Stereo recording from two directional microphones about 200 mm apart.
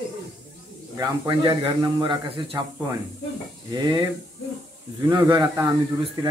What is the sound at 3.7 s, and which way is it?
Speech, 20° right (ahead or behind).